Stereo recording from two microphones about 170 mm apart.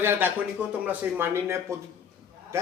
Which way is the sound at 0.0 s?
10° right (ahead or behind).